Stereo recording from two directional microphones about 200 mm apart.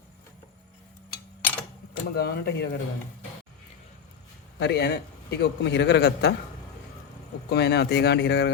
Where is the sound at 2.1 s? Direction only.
55° left (ahead or behind).